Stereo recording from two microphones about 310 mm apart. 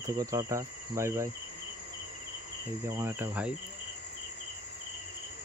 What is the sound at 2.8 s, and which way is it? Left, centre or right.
Cricket, centre.